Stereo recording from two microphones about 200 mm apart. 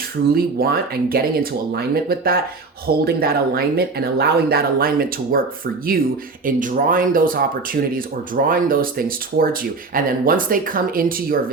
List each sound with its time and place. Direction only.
0.3 s speech: 50° right (ahead or behind)
6.4 s speech: 40° right (ahead or behind)